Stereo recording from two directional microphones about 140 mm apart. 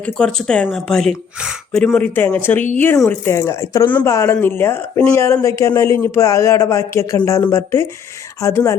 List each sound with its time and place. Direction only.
0.0 s speech: 5° left (ahead or behind); by 8.7 s 20° left (ahead or behind)